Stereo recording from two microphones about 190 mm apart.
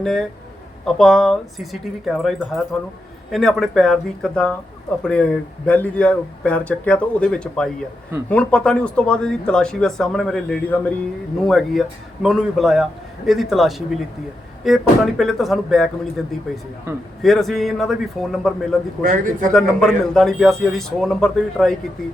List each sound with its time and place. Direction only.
0.0 s speech: centre (ahead or behind)
16.9 s a man's voice: 15° right (ahead or behind)
17.2 s speech: centre (ahead or behind)
19.0 s speech: 45° right (ahead or behind)
19.5 s speech: centre (ahead or behind)